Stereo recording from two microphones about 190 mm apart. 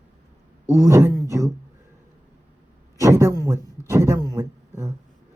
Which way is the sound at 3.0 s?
15° right (ahead or behind).